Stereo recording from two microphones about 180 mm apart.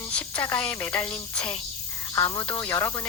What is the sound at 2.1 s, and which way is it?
Speech, 20° left (ahead or behind).